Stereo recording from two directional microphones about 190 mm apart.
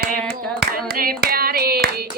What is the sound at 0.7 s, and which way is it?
Hands, 50° right (ahead or behind).